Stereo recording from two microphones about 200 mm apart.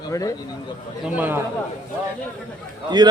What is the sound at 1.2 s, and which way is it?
Speech, 10° right (ahead or behind).